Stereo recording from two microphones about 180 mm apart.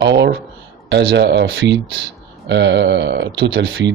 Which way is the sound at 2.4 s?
80° right.